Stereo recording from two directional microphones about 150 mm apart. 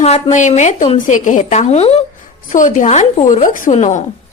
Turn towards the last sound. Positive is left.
turn(degrees=55)  # may be behind; listen again after turning